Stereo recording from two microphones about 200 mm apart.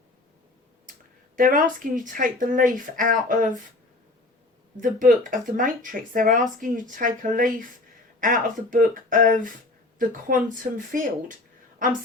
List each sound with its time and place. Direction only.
1.4 s speech: 40° right (ahead or behind)
4.8 s speech: 40° right (ahead or behind)